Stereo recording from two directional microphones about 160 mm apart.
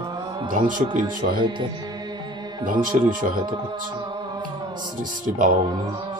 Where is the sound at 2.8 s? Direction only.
60° right (ahead or behind).